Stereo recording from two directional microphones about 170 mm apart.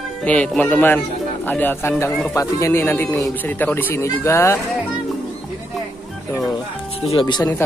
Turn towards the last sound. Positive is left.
turn(degrees=30)  # may be behind; listen again after turning